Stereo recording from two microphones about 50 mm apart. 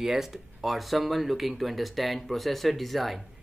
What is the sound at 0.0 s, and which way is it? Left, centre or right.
Speech, centre.